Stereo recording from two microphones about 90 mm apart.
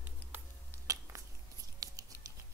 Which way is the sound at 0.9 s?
35° right (ahead or behind).